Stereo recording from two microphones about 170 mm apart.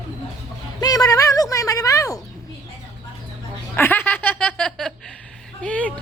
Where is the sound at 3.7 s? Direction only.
10° left (ahead or behind).